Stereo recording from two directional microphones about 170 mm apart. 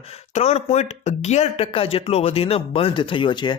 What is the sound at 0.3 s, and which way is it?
Speech, 40° left (ahead or behind).